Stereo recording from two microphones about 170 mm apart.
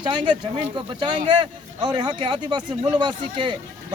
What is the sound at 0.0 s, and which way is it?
Speech, 25° right (ahead or behind).